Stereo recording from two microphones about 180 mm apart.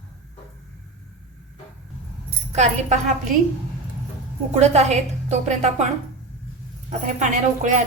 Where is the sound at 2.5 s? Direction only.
40° right (ahead or behind).